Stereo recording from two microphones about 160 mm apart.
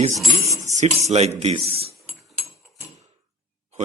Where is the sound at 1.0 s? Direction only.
45° right (ahead or behind).